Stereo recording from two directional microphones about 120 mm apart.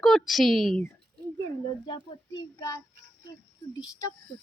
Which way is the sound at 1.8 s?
40° left (ahead or behind).